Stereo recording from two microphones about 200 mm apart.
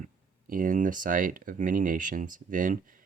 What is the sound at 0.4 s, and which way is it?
Speech, 45° right (ahead or behind).